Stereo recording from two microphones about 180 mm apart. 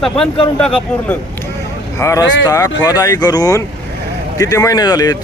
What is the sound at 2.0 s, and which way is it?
Speech, 20° left (ahead or behind).